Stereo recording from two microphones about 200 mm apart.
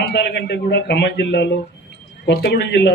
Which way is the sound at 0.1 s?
55° left (ahead or behind).